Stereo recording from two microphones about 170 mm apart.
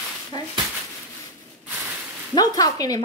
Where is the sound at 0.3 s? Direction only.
25° left (ahead or behind).